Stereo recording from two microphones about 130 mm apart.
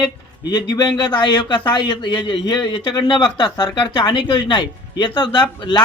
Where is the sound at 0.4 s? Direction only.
30° left (ahead or behind).